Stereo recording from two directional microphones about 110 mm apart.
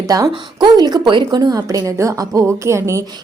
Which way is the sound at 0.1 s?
35° right (ahead or behind).